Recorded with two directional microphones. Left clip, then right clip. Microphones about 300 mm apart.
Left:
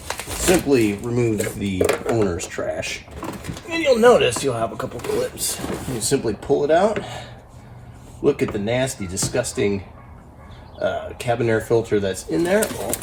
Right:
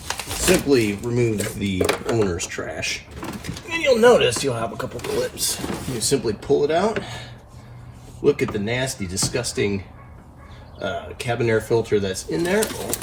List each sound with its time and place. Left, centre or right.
0.1 s speech: centre
1.9 s speech: centre
2.2 s speech: centre
8.2 s speech: centre
10.8 s speech: centre